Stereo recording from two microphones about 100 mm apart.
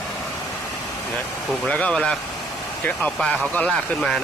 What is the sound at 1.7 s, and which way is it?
Speech, 10° left (ahead or behind).